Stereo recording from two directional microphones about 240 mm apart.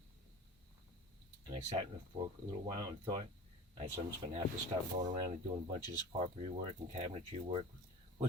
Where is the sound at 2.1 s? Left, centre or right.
Centre.